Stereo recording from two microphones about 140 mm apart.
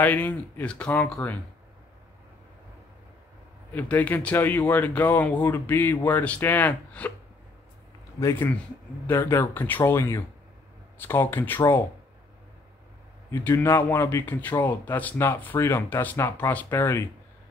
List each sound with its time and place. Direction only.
0.0 s speech: 10° left (ahead or behind)
3.7 s speech: 15° left (ahead or behind)
8.2 s a man's voice: 20° left (ahead or behind)
13.3 s speech: 15° left (ahead or behind)